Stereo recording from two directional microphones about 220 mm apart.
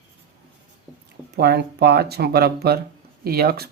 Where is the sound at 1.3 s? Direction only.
45° right (ahead or behind).